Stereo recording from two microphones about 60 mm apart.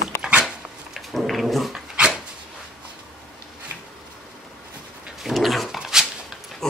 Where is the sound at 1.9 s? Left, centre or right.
Centre.